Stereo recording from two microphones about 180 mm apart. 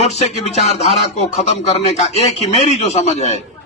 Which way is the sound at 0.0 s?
35° left (ahead or behind).